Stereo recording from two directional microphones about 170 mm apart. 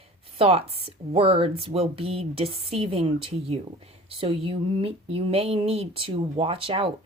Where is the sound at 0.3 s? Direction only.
35° right (ahead or behind).